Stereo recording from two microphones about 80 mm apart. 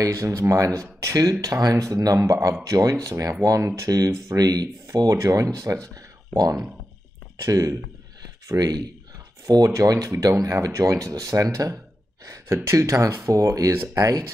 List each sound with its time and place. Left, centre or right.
0.0 s speech: right
8.5 s speech: right
9.7 s speech: right